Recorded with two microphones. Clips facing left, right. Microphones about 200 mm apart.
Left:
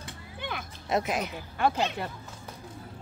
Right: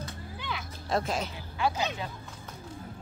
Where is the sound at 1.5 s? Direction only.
55° left (ahead or behind).